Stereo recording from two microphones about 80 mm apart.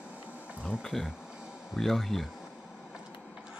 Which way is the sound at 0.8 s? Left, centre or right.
Centre.